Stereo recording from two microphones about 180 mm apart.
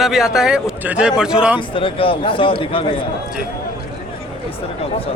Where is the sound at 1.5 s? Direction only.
30° left (ahead or behind).